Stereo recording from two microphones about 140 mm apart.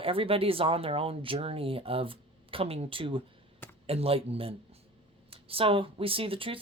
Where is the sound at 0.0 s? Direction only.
40° right (ahead or behind).